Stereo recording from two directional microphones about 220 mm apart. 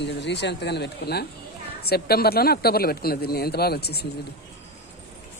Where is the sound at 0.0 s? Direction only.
50° left (ahead or behind).